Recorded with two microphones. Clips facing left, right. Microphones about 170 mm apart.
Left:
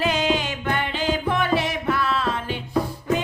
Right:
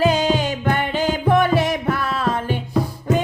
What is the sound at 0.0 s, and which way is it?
Music, 40° right (ahead or behind).